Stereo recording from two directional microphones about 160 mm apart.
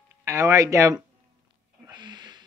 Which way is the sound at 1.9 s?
30° right (ahead or behind).